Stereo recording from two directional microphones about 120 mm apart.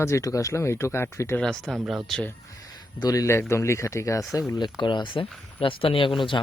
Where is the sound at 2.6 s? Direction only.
35° left (ahead or behind).